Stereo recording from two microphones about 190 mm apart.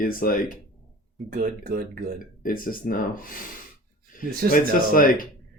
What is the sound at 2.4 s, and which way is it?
Speech, 50° left (ahead or behind).